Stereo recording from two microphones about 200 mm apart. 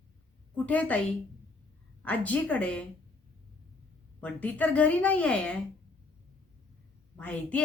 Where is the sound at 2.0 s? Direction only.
5° left (ahead or behind).